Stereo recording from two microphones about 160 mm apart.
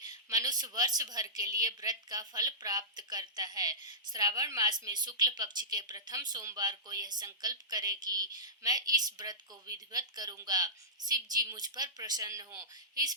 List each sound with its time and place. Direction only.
0.0 s a woman's voice: 25° right (ahead or behind)